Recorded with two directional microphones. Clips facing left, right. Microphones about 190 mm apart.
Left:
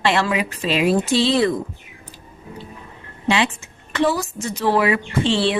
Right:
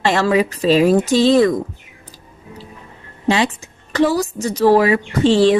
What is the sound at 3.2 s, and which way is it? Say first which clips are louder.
A woman's voice: right 3 dB; 40° right (ahead or behind).